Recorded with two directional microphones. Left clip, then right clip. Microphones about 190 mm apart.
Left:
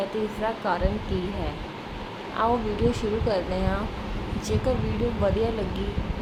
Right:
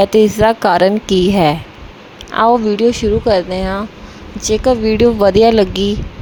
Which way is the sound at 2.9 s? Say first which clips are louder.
Right 13 dB; 45° right (ahead or behind).